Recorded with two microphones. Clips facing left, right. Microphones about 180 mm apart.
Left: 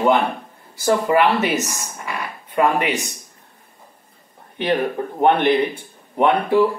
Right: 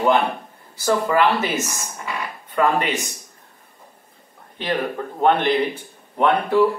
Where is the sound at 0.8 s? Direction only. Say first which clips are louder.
Left 2 dB; 15° left (ahead or behind).